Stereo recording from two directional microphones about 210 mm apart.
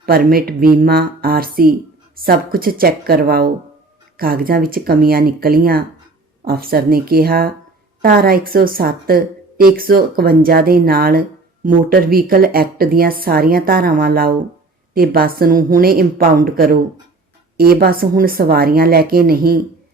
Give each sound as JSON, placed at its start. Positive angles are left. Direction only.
{"t": 0.0, "sound": "a woman's voice", "side_deg": -45}